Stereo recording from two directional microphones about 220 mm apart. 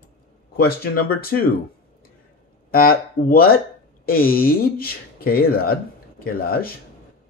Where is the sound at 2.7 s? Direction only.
40° left (ahead or behind).